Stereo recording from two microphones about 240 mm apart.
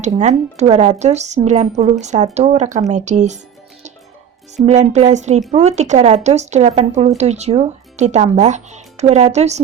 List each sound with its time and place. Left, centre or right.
0.0 s speech: right
4.5 s speech: right